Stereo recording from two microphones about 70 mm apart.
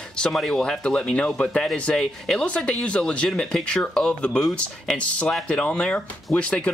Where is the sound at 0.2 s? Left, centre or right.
Centre.